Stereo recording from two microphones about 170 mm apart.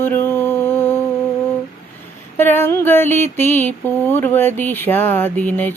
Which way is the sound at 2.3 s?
15° left (ahead or behind).